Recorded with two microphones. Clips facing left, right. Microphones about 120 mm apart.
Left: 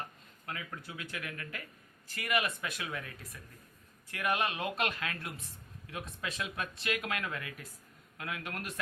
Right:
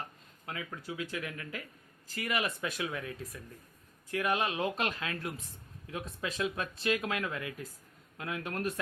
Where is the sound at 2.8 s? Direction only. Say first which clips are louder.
Right 6 dB; 20° right (ahead or behind).